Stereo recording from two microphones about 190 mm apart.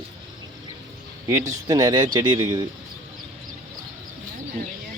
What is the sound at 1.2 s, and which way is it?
Speech, 15° right (ahead or behind).